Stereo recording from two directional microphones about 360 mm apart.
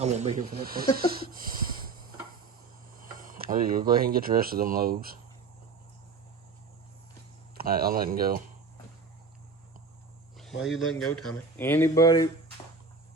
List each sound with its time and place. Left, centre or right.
0.0 s speech: centre
2.9 s speech: right
7.5 s speech: right
10.3 s speech: centre